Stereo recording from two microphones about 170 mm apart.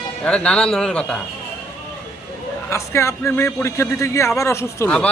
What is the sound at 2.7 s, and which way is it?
A man's voice, 15° left (ahead or behind).